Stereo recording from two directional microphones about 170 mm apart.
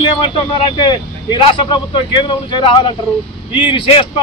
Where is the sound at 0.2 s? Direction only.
30° left (ahead or behind).